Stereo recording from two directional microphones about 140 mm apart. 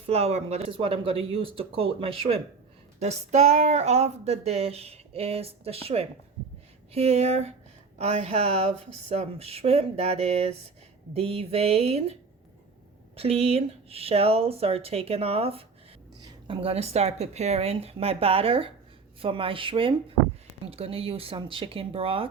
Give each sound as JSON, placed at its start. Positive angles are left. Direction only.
{"t": 0.1, "sound": "speech", "side_deg": -50}
{"t": 3.0, "sound": "speech", "side_deg": -50}
{"t": 13.1, "sound": "speech", "side_deg": -45}